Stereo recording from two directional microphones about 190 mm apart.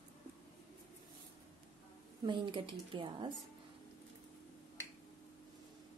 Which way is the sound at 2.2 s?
25° right (ahead or behind).